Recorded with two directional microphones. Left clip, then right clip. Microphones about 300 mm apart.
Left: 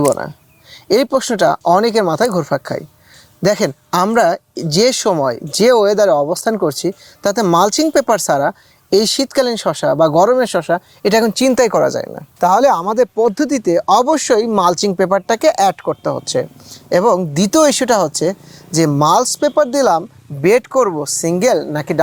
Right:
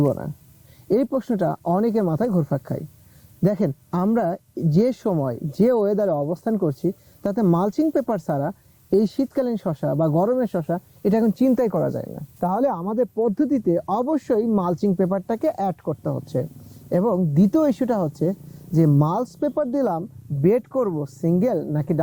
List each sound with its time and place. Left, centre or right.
0.0 s speech: centre
6.6 s speech: centre